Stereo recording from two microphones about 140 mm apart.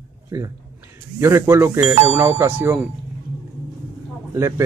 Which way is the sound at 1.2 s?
15° right (ahead or behind).